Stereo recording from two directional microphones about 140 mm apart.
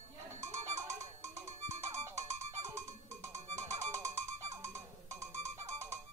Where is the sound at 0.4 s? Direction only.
55° right (ahead or behind).